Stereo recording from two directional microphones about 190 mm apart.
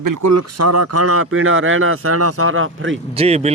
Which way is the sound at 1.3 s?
90° right.